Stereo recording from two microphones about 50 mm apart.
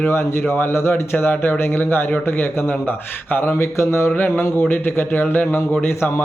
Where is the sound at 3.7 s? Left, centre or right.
Left.